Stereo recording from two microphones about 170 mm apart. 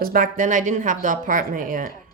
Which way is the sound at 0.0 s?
55° right (ahead or behind).